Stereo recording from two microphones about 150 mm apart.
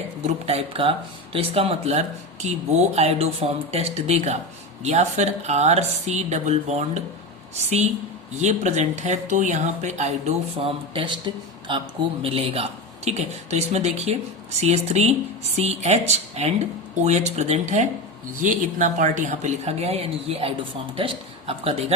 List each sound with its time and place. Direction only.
0.4 s speech: 40° right (ahead or behind)
18.4 s speech: 60° right (ahead or behind); by 21.9 s 40° right (ahead or behind)